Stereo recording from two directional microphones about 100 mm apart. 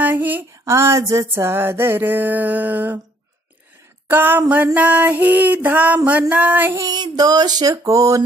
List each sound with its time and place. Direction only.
0.0 s female singing: 20° right (ahead or behind)
4.1 s female singing: 20° right (ahead or behind)
4.7 s music: 15° right (ahead or behind)
6.7 s female singing: 40° right (ahead or behind)